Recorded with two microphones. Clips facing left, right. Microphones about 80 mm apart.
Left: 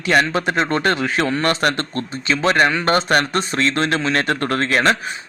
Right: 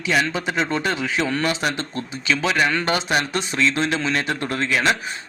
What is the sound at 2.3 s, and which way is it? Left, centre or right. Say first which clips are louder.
Speech: left 4 dB; left.